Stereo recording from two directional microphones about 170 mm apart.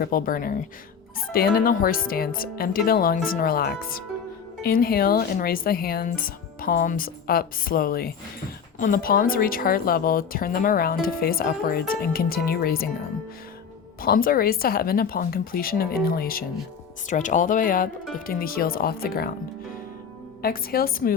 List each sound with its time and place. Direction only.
0.0 s speech: 55° left (ahead or behind)
14.0 s speech: 60° left (ahead or behind)
17.1 s speech: 50° left (ahead or behind); by 19.3 s 65° left (ahead or behind)
20.4 s speech: 60° left (ahead or behind)